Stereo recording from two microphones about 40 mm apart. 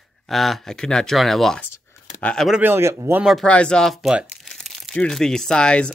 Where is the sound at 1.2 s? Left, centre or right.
Centre.